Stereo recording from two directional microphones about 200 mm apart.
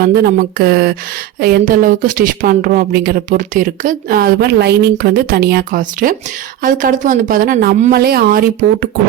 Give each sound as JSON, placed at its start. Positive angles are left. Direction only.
{"t": 0.0, "sound": "a woman's voice", "side_deg": -50}